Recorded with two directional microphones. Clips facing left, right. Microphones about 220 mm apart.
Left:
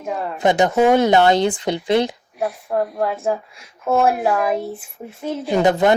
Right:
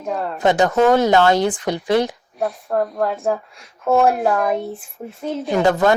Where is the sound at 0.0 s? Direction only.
5° left (ahead or behind).